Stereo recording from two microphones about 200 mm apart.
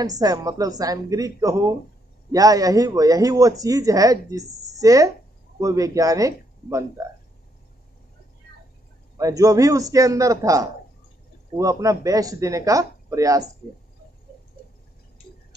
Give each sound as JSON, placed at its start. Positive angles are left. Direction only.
{"t": 0.0, "sound": "speech", "side_deg": -20}
{"t": 9.2, "sound": "speech", "side_deg": -15}